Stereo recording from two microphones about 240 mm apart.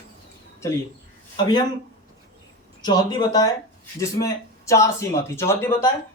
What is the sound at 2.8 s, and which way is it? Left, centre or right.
A man's voice, centre.